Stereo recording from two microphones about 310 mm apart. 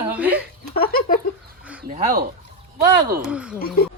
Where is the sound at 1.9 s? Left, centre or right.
Right.